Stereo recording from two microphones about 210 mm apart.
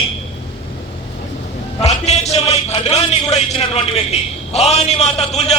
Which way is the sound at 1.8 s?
30° left (ahead or behind).